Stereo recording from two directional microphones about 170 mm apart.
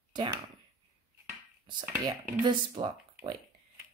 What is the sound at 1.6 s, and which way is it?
A woman's voice, 25° right (ahead or behind).